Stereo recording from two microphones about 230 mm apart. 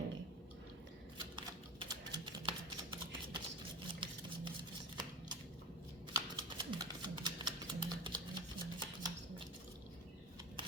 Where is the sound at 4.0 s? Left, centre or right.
Right.